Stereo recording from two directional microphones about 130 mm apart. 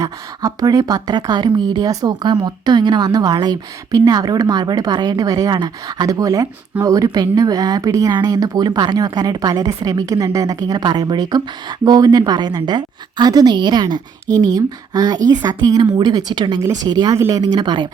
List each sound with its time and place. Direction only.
0.0 s speech: 25° right (ahead or behind)
17.2 s a woman's voice: 25° right (ahead or behind)
17.4 s speech: 35° right (ahead or behind)